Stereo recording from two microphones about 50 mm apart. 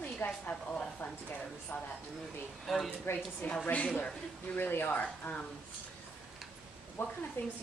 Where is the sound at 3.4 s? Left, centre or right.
Left.